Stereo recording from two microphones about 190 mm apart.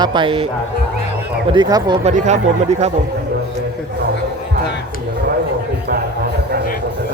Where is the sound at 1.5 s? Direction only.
20° right (ahead or behind).